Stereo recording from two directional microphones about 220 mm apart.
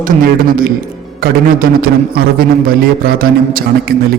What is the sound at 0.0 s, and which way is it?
A man's voice, 40° right (ahead or behind).